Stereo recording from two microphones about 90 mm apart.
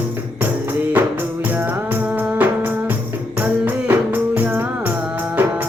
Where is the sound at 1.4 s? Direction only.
20° right (ahead or behind).